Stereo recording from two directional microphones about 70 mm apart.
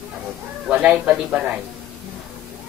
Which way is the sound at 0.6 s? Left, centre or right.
Right.